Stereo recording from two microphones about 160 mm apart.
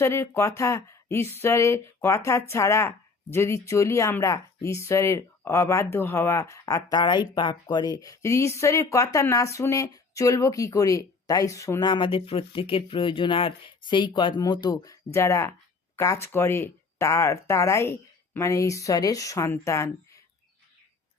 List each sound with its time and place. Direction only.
0.0 s a woman's voice: 15° left (ahead or behind)
11.9 s a woman's voice: 30° left (ahead or behind)